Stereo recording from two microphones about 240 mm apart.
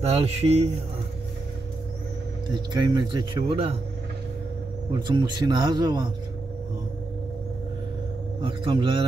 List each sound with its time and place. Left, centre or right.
0.0 s speech: right
2.5 s speech: centre
4.9 s speech: centre
8.4 s speech: right